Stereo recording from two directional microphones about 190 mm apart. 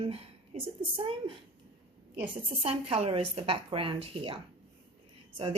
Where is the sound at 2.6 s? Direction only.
30° right (ahead or behind).